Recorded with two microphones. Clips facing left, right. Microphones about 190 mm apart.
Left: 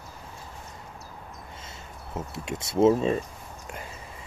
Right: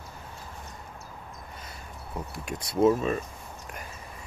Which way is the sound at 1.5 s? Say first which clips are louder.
Even; 25° left (ahead or behind).